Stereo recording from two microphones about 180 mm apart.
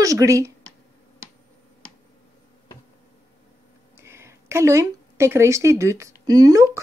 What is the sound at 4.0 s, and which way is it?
Speech, 15° right (ahead or behind).